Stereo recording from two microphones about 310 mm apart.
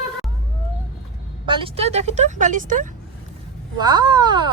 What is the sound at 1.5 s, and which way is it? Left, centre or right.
Speech, centre.